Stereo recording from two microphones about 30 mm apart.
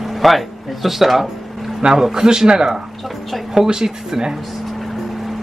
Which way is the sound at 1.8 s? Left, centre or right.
Right.